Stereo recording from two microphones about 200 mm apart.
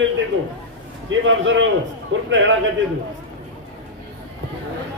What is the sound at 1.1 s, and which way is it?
A man's voice, 70° right (ahead or behind).